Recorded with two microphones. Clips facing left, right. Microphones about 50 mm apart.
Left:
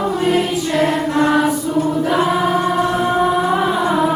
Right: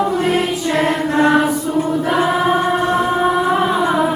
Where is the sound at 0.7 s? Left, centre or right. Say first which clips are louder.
Even; right.